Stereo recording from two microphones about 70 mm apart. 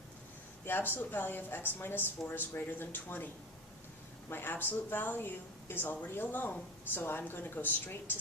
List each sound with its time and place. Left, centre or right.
0.6 s speech: left
4.3 s speech: left